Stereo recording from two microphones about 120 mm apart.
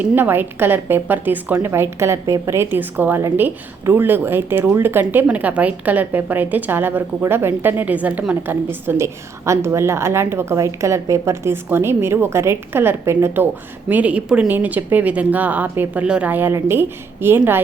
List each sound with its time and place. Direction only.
0.0 s a woman's voice: 15° right (ahead or behind)